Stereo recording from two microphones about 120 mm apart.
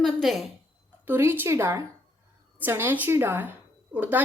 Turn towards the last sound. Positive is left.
turn(degrees=-15)  # may be behind; listen again after turning